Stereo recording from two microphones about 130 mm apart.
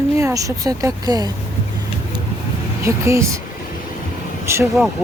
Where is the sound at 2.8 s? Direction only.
20° right (ahead or behind).